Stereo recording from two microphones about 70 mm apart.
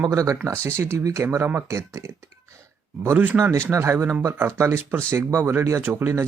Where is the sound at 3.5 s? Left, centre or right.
Right.